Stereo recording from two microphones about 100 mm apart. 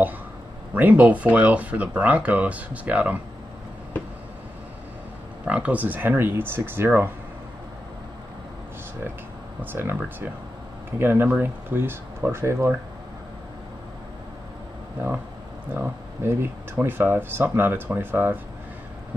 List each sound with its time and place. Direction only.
0.7 s speech: 15° right (ahead or behind)
5.4 s speech: 15° right (ahead or behind)
9.6 s speech: 20° right (ahead or behind)
15.7 s speech: 20° right (ahead or behind)